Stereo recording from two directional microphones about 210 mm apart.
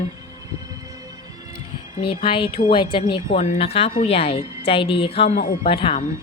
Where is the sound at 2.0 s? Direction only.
25° left (ahead or behind).